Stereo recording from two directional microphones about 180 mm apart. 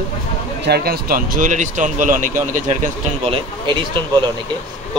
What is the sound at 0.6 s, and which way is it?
Speech, 60° right (ahead or behind).